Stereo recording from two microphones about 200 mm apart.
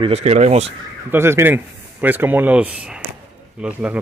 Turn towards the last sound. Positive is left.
turn(degrees=-5)  # may be behind; listen again after turning